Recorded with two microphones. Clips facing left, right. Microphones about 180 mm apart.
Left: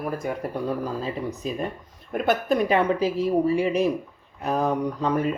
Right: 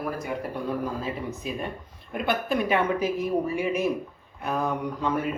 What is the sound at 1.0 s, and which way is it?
Speech, 35° left (ahead or behind).